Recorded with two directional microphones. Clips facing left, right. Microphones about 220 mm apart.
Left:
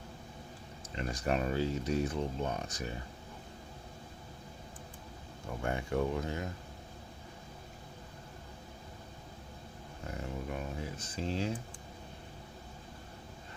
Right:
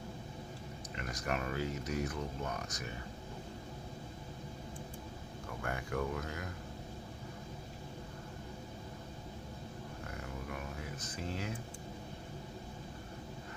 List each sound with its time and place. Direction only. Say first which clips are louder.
0.9 s speech: left 5 dB; 30° left (ahead or behind)
5.6 s speech: left 5 dB; 25° left (ahead or behind)
10.2 s a sound: left 6 dB; 25° left (ahead or behind)